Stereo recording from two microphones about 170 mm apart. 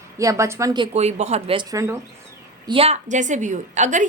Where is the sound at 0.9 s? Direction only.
40° right (ahead or behind); by 2.0 s 20° right (ahead or behind).